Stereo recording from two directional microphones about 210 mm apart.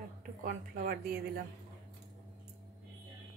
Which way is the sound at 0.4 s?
45° right (ahead or behind).